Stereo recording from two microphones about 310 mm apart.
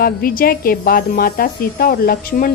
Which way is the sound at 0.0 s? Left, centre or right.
Left.